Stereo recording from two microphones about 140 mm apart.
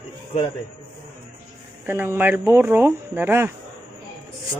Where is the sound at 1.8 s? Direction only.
15° right (ahead or behind).